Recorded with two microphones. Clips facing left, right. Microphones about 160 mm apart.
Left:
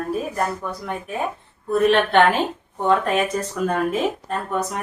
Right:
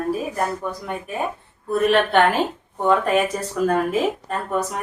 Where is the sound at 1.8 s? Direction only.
5° right (ahead or behind).